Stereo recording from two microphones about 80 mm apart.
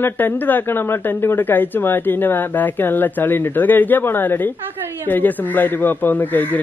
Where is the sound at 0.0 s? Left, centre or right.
Left.